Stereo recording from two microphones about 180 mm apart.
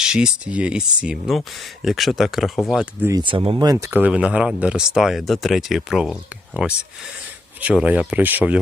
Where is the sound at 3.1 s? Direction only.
30° right (ahead or behind).